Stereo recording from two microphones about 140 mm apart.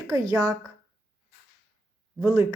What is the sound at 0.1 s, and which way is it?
Speech, 25° right (ahead or behind).